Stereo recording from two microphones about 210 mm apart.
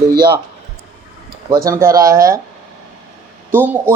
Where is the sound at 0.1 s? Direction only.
45° right (ahead or behind).